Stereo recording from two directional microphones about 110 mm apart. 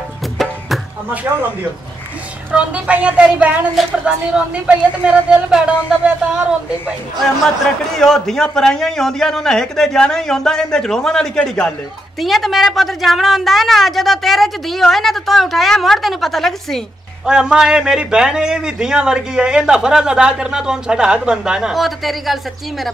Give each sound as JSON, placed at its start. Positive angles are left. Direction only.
{"t": 1.3, "sound": "speech", "side_deg": -25}
{"t": 2.5, "sound": "a man's voice", "side_deg": -10}
{"t": 8.0, "sound": "a woman's voice", "side_deg": 5}